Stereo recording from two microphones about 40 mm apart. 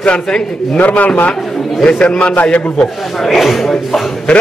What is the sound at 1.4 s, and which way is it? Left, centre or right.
Speech, centre.